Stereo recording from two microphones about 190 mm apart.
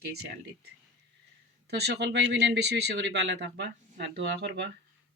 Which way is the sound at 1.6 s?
60° right (ahead or behind).